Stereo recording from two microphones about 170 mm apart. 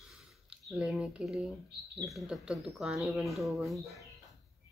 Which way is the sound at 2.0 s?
Centre (ahead or behind).